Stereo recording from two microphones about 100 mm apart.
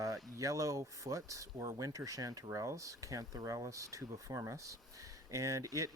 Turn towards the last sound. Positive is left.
turn(degrees=-35)  # may be behind; listen again after turning